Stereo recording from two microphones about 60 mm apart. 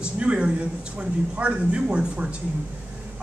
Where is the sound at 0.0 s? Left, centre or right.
Centre.